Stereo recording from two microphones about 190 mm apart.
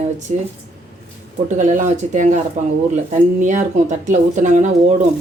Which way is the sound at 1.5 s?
40° right (ahead or behind).